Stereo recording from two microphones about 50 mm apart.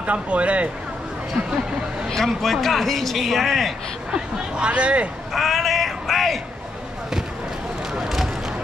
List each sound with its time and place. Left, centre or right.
0.0 s speech: right
2.0 s a man's voice: centre
4.1 s speech: right
5.3 s speech: centre